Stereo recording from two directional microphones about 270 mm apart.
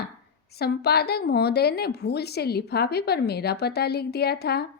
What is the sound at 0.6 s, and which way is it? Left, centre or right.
A woman's voice, left.